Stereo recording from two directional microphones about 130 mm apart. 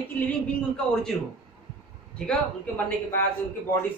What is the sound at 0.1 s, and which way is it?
Speech, 10° left (ahead or behind).